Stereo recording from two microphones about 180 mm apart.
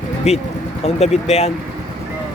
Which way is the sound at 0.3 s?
35° left (ahead or behind).